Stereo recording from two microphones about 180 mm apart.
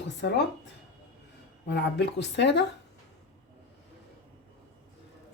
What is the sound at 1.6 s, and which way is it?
Speech, 70° left (ahead or behind).